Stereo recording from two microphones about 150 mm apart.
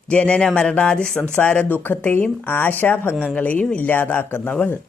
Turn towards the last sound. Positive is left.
turn(degrees=10)  # may be behind; listen again after turning